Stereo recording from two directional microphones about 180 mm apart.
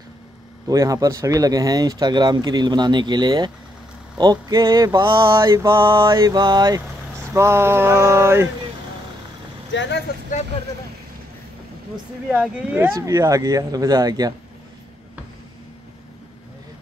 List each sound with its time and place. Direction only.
0.7 s speech: 20° right (ahead or behind)
5.4 s mantra: 15° right (ahead or behind)
9.7 s speech: 80° left
12.3 s speech: 10° right (ahead or behind)